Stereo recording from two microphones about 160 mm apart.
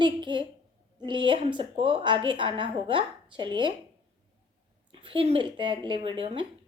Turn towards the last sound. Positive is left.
turn(degrees=-35)  # may be behind; listen again after turning